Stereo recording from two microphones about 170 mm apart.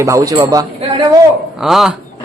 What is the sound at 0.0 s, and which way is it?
Speech, 20° right (ahead or behind).